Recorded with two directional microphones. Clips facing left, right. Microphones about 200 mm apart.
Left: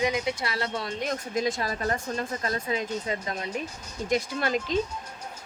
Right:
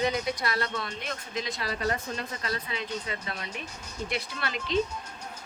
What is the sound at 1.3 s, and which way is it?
Speech, 45° left (ahead or behind).